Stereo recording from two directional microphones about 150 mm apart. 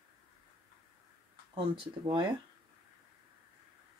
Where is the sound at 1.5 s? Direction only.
35° right (ahead or behind).